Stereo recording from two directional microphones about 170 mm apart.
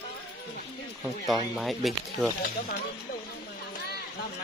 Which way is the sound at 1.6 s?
Centre (ahead or behind).